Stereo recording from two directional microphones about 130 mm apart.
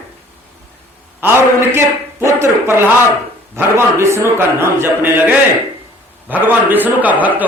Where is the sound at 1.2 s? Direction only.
20° right (ahead or behind).